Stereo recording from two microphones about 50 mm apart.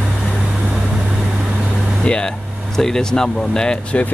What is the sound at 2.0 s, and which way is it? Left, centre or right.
Speech, centre.